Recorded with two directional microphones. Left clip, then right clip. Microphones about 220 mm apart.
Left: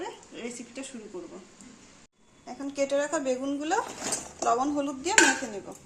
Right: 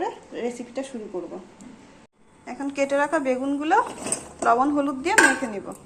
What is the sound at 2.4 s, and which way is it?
Speech, 5° right (ahead or behind).